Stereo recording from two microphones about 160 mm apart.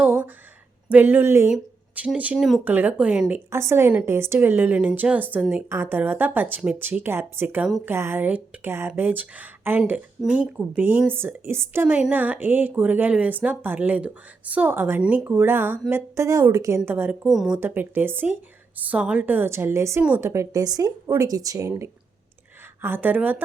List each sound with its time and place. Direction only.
0.0 s a sound: 10° right (ahead or behind)
0.9 s speech: 10° right (ahead or behind)
1.5 s speech: 5° right (ahead or behind)